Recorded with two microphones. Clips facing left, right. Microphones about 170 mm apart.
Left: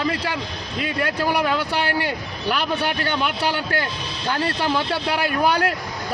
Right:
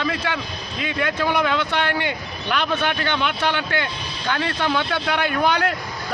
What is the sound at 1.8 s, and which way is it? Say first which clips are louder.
Speech: even; 35° left (ahead or behind).